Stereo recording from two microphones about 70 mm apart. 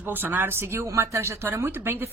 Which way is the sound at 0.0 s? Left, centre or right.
Right.